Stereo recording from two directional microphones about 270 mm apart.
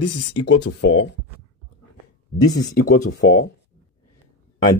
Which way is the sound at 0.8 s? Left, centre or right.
Left.